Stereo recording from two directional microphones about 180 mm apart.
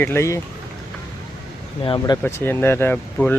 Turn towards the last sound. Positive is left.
turn(degrees=10)  # may be behind; listen again after turning